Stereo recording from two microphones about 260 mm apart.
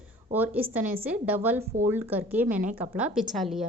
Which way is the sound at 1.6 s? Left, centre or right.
Right.